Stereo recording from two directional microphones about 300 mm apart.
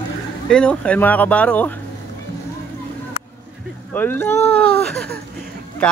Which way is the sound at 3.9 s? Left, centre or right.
Centre.